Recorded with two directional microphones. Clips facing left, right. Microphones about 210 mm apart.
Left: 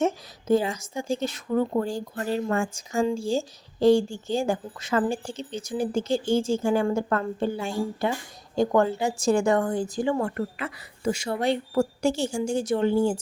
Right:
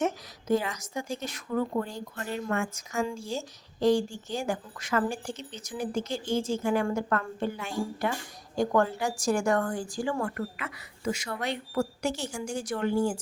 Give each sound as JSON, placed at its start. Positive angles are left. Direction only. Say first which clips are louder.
{"t": 0.0, "sound": "a woman's voice", "louder": "left 4 dB", "side_deg": 30}